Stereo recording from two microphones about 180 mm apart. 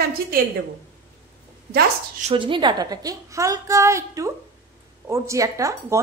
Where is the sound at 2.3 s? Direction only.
25° right (ahead or behind).